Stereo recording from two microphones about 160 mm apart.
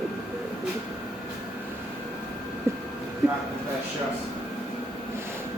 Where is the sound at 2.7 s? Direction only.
15° right (ahead or behind).